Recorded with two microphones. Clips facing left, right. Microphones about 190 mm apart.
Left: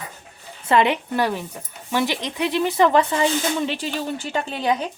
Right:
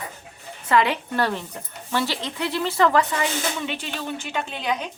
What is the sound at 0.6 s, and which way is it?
Speech, 25° left (ahead or behind).